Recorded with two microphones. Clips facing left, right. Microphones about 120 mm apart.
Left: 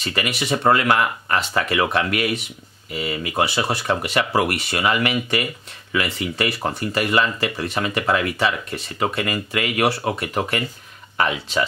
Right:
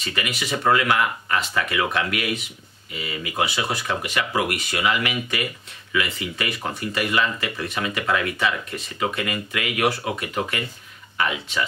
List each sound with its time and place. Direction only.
0.0 s speech: 35° left (ahead or behind)